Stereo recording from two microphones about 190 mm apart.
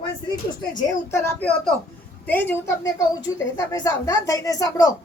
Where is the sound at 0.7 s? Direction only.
15° left (ahead or behind).